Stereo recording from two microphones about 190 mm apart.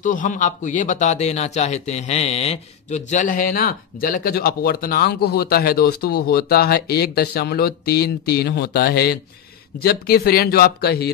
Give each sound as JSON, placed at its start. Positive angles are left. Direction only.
{"t": 0.0, "sound": "a man's voice", "side_deg": 40}